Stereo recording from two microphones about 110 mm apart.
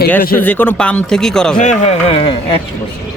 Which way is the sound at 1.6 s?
80° left.